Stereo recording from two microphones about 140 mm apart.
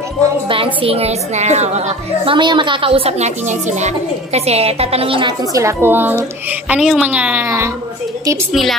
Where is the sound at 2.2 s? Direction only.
35° right (ahead or behind).